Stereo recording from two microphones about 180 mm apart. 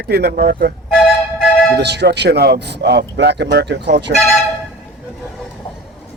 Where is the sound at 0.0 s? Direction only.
60° right (ahead or behind).